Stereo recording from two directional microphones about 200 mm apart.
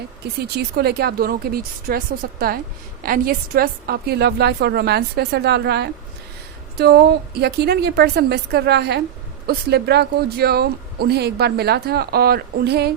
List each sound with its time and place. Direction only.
0.5 s a woman's voice: 55° right (ahead or behind)